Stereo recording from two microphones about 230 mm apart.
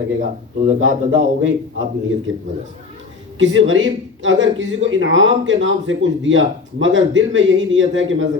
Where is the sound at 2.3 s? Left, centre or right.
Right.